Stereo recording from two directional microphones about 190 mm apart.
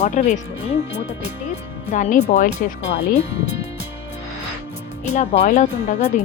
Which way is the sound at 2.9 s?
60° left (ahead or behind).